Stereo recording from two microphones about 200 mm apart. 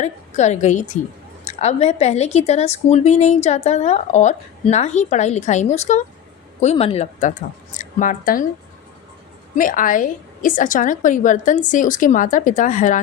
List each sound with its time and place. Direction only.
0.0 s a woman's voice: 35° left (ahead or behind)
9.6 s a woman's voice: 40° left (ahead or behind)